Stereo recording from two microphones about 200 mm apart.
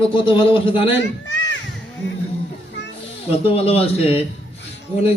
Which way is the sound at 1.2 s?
65° left (ahead or behind).